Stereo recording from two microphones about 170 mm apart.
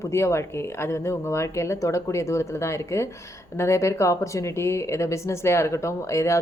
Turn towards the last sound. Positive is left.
turn(degrees=15)  # may be behind; listen again after turning